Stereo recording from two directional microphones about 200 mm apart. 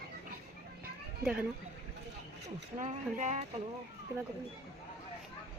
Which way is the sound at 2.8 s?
35° right (ahead or behind).